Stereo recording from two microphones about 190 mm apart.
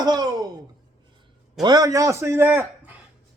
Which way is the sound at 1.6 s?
20° right (ahead or behind).